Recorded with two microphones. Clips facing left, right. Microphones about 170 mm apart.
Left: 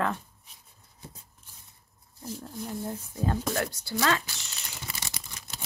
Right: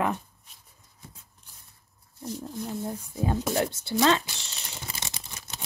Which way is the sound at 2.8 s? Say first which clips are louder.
Right 1 dB; 15° right (ahead or behind).